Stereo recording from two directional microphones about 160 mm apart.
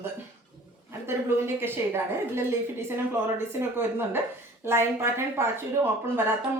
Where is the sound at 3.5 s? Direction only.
15° right (ahead or behind).